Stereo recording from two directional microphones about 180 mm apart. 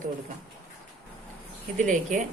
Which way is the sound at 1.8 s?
45° right (ahead or behind).